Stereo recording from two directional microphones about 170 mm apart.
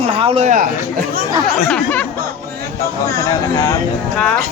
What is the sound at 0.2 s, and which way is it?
Speech, 35° right (ahead or behind).